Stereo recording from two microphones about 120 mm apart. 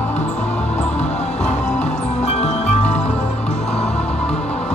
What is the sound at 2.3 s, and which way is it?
Music, 65° left (ahead or behind).